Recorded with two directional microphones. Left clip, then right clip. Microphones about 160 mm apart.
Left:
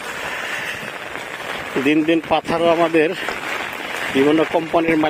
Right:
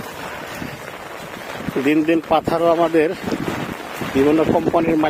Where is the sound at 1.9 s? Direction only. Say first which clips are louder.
Even; 25° right (ahead or behind).